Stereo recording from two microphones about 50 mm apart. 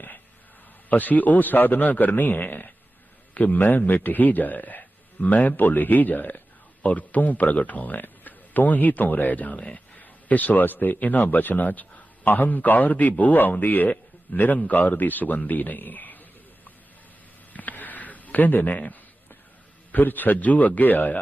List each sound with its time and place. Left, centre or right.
0.9 s speech: left
17.5 s a sound: left
19.9 s speech: left